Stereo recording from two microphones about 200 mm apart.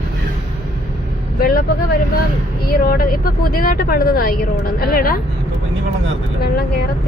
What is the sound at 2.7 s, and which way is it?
Speech, 45° left (ahead or behind).